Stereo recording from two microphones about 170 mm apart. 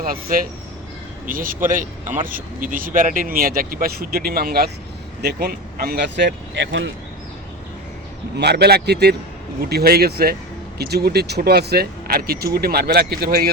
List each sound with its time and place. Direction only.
0.0 s speech: 55° right (ahead or behind); by 6.9 s 90° right
8.4 s speech: 75° right (ahead or behind)